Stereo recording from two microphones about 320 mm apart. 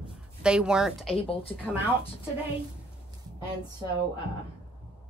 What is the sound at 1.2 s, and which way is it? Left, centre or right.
Speech, centre.